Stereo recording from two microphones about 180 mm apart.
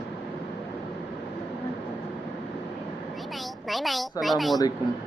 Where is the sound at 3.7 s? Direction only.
Centre (ahead or behind).